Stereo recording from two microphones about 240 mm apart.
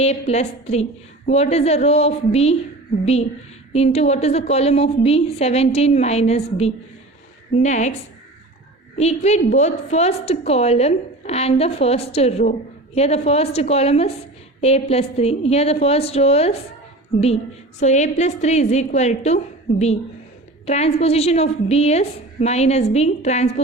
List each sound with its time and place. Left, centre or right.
0.0 s speech: left
9.0 s speech: left
17.7 s speech: left
20.7 s speech: left